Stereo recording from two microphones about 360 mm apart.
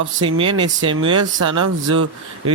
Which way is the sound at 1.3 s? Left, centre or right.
Right.